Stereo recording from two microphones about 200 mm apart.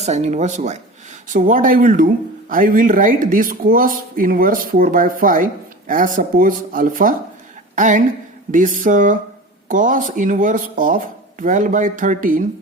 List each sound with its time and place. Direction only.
0.0 s speech: 35° right (ahead or behind)